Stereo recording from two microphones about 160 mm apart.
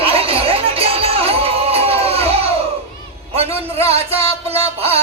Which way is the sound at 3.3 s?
40° right (ahead or behind).